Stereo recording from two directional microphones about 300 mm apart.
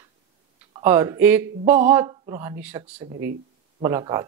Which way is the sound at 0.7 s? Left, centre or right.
Centre.